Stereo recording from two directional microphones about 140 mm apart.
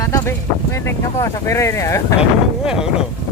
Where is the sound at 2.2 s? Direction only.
5° right (ahead or behind).